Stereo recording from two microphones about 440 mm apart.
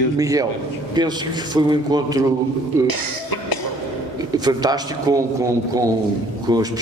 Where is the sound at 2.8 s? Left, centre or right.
Left.